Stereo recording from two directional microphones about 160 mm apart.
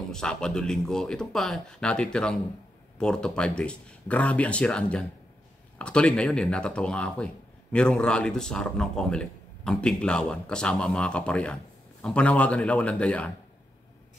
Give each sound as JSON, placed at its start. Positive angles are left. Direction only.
{"t": 0.1, "sound": "a man's voice", "side_deg": 5}